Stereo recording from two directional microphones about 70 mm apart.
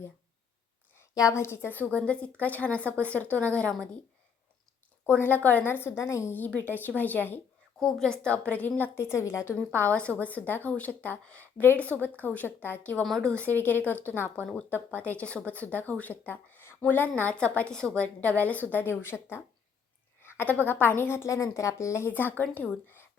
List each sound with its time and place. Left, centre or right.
1.1 s a woman's voice: left
1.7 s a woman's voice: left
5.2 s a woman's voice: left
6.0 s a woman's voice: left
6.3 s a woman's voice: left
7.8 s speech: centre
8.2 s a woman's voice: left
9.0 s a woman's voice: left
9.6 s a woman's voice: left
13.0 s speech: centre
13.6 s a woman's voice: left
22.5 s a woman's voice: left